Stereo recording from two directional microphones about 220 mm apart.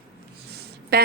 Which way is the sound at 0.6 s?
45° right (ahead or behind).